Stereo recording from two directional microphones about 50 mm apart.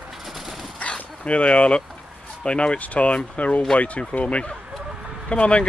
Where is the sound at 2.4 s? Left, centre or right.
Left.